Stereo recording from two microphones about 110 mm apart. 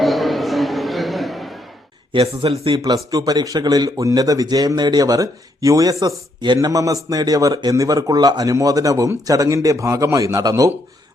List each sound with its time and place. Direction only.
0.0 s a sound: centre (ahead or behind)
2.4 s speech: 55° right (ahead or behind)
2.7 s speech: 35° right (ahead or behind)